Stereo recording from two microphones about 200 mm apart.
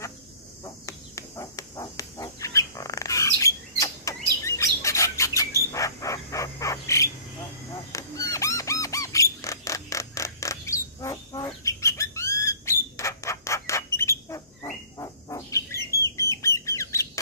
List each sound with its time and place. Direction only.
0.8 s bird: 15° left (ahead or behind)
7.9 s music: 15° left (ahead or behind)